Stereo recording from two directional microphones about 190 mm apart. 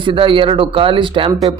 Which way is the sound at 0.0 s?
25° right (ahead or behind).